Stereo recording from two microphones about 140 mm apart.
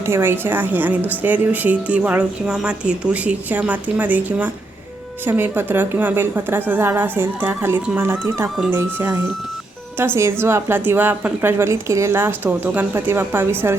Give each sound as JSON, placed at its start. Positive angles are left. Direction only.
{"t": 0.0, "sound": "a woman's voice", "side_deg": -15}